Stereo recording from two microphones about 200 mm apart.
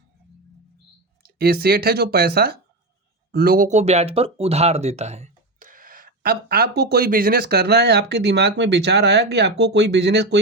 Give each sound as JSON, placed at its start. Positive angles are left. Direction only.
{"t": 1.2, "sound": "speech", "side_deg": -50}